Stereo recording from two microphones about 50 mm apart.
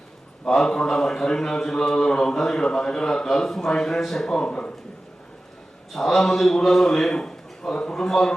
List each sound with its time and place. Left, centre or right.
0.4 s a man's voice: centre
4.3 s speech: centre
5.9 s a man's voice: centre